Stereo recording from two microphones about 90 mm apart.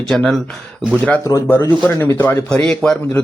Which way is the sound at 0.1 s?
5° left (ahead or behind).